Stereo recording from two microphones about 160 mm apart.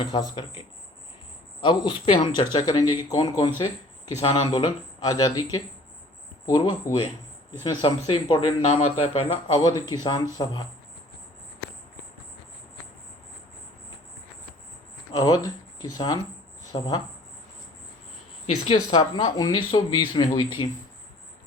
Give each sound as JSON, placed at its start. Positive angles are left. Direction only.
{"t": 0.0, "sound": "speech", "side_deg": 30}
{"t": 1.6, "sound": "speech", "side_deg": 30}
{"t": 4.2, "sound": "a man's voice", "side_deg": 35}
{"t": 15.1, "sound": "speech", "side_deg": 25}
{"t": 18.9, "sound": "speech", "side_deg": 25}